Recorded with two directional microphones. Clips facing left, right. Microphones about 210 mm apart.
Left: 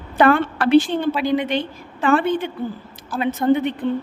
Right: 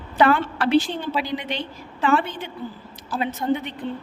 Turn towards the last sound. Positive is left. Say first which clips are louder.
# left 6 dB
turn(degrees=55)  # may be behind; listen again after turning